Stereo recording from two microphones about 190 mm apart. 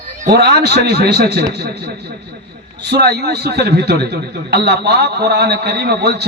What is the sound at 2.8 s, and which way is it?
A man's voice, 60° right (ahead or behind).